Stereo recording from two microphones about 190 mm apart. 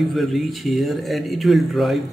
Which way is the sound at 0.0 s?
Centre (ahead or behind).